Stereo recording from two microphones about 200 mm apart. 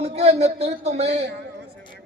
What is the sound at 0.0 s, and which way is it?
A man's voice, 30° right (ahead or behind).